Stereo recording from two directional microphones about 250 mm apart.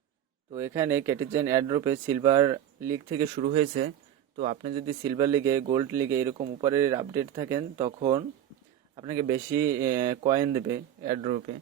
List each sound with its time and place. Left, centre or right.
0.5 s speech: centre
9.0 s speech: centre